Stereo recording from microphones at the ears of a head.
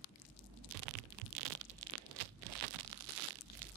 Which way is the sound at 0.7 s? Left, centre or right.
Right.